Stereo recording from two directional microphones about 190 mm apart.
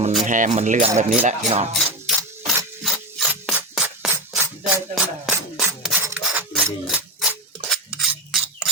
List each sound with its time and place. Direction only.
0.3 s speech: 40° right (ahead or behind)
1.8 s a sound: 5° right (ahead or behind)
5.2 s mechanisms: 5° right (ahead or behind)
8.1 s filing: centre (ahead or behind)